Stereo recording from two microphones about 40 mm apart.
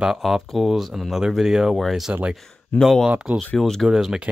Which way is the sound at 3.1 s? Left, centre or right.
Right.